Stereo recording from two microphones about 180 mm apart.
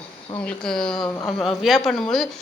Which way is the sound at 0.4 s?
5° left (ahead or behind).